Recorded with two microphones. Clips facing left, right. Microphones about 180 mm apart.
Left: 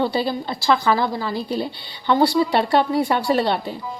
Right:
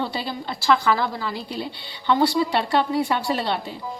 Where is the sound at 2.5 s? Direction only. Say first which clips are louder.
Left 3 dB; 45° left (ahead or behind).